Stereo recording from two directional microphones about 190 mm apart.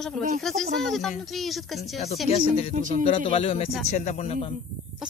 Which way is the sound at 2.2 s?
30° left (ahead or behind).